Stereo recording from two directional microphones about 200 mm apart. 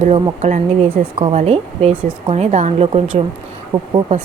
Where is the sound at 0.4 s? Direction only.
35° right (ahead or behind).